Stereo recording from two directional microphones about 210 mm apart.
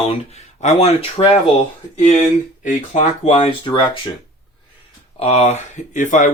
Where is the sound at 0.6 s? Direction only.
30° left (ahead or behind).